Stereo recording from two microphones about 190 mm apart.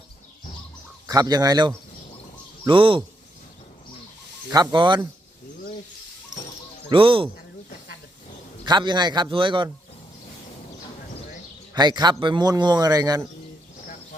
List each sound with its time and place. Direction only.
1.0 s a man's voice: 20° right (ahead or behind)
4.5 s a man's voice: 20° right (ahead or behind)
6.9 s a man's voice: 25° right (ahead or behind)
8.6 s a man's voice: 25° right (ahead or behind)
11.7 s a man's voice: 20° right (ahead or behind)